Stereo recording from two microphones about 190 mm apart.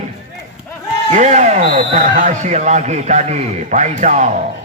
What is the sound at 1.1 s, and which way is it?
Speech, 40° right (ahead or behind).